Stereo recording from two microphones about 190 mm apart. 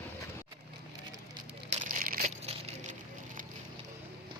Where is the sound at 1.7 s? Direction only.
45° right (ahead or behind).